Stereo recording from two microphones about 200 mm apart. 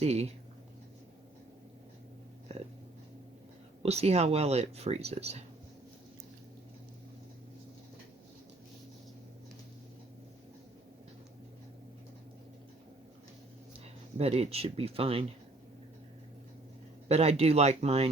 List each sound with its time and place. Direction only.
0.0 s speech: 30° right (ahead or behind)
3.8 s speech: 30° right (ahead or behind)
14.2 s speech: 30° right (ahead or behind)
17.1 s speech: 30° right (ahead or behind)